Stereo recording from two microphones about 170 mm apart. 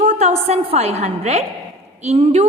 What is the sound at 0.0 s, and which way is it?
A woman's voice, 40° right (ahead or behind).